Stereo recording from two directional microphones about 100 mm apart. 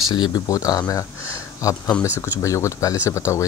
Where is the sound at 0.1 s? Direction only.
40° left (ahead or behind).